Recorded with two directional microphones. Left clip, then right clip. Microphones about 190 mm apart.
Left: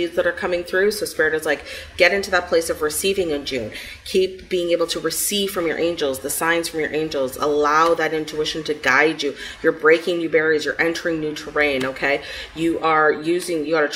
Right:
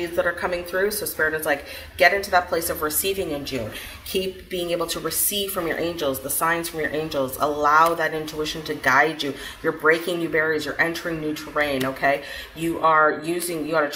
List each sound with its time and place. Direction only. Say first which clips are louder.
0.0 s speech: left 3 dB; 45° left (ahead or behind)